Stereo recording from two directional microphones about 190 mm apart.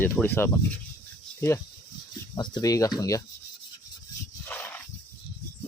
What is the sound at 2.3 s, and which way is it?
Speech, 20° left (ahead or behind).